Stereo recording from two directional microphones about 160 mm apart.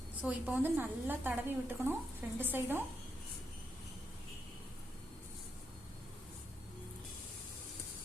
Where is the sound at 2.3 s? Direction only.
15° right (ahead or behind).